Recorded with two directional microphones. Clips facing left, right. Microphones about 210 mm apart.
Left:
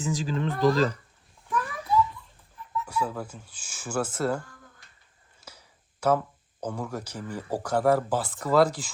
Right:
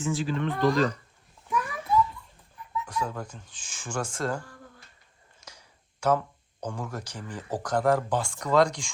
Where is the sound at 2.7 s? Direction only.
5° left (ahead or behind).